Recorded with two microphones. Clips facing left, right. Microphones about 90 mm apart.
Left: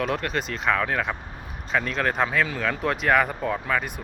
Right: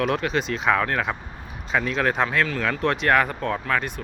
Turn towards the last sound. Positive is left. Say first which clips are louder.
# right 1 dB
turn(degrees=5)  # may be behind; listen again after turning